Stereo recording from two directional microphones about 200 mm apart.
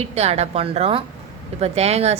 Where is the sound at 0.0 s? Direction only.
30° right (ahead or behind).